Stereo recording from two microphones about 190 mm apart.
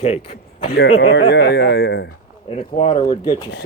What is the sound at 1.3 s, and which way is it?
Speech, 55° left (ahead or behind).